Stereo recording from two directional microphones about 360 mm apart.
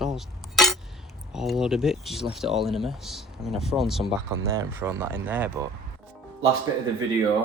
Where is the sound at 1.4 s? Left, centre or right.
Centre.